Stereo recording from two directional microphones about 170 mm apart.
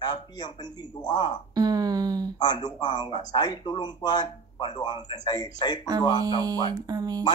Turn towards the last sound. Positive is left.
turn(degrees=-25)  # may be behind; listen again after turning